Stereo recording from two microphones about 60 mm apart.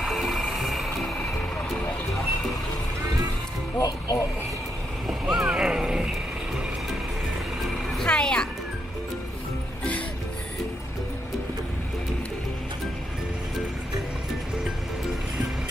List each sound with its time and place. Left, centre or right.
0.0 s vehicle: centre
3.7 s a sound: left
5.0 s boat: centre
8.0 s music: centre